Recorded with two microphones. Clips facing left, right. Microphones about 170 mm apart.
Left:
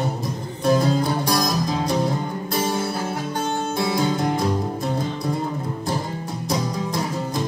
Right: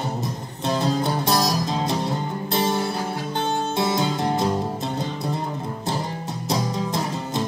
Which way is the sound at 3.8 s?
20° right (ahead or behind).